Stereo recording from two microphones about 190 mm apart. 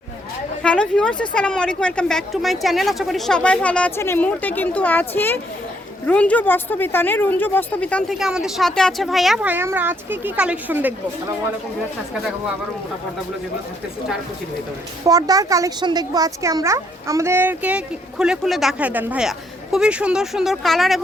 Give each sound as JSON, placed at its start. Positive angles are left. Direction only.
{"t": 0.6, "sound": "a woman's voice", "side_deg": 5}
{"t": 15.0, "sound": "a woman's voice", "side_deg": -20}